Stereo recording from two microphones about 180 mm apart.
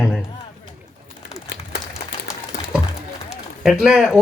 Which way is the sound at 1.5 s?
70° left (ahead or behind).